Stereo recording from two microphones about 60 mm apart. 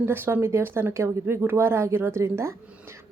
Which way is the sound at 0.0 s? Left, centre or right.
Right.